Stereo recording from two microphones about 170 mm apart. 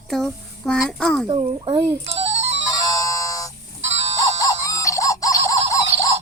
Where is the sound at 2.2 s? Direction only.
40° right (ahead or behind).